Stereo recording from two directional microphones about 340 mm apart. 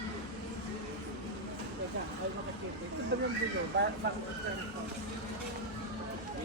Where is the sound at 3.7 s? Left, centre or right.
Right.